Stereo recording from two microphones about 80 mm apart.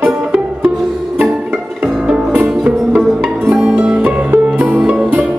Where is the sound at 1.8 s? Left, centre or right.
Centre.